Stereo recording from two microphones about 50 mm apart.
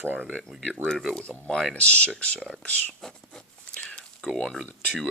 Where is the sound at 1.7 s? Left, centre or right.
Left.